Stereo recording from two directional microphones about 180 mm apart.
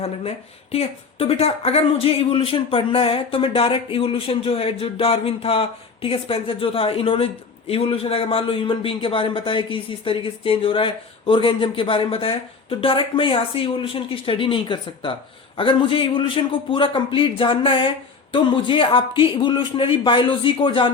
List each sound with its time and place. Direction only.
0.7 s a man's voice: 35° left (ahead or behind)